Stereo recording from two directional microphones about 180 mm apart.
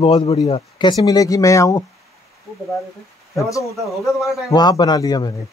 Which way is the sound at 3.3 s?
15° left (ahead or behind).